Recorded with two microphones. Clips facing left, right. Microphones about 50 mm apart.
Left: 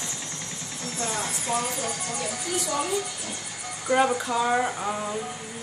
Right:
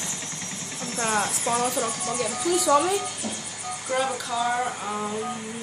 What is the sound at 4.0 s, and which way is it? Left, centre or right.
Speech, left.